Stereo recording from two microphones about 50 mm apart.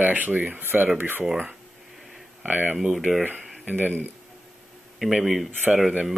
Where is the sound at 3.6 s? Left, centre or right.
Right.